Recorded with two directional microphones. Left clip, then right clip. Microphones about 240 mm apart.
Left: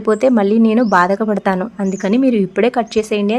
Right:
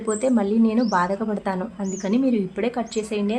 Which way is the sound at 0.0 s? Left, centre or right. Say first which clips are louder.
Left 9 dB; left.